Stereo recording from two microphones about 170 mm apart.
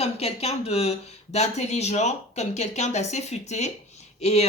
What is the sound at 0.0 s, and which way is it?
Speech, 40° left (ahead or behind).